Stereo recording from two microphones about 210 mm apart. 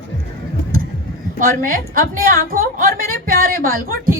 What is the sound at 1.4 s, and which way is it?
A woman's voice, 45° right (ahead or behind).